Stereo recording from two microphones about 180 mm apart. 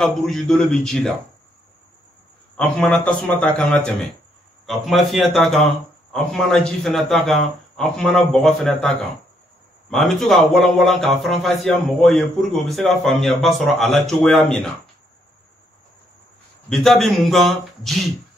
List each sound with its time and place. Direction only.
0.0 s a man's voice: 5° left (ahead or behind)
2.5 s a man's voice: 5° left (ahead or behind)
16.6 s a man's voice: centre (ahead or behind)